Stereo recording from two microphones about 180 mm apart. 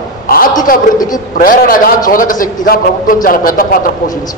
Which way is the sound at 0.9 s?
20° left (ahead or behind).